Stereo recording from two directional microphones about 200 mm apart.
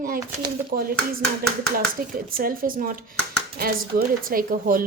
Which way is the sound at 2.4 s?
45° right (ahead or behind).